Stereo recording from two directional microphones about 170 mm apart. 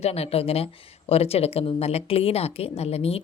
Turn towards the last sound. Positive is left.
turn(degrees=35)  # may be behind; listen again after turning